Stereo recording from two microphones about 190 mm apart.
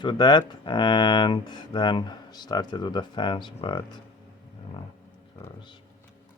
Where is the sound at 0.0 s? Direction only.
25° left (ahead or behind).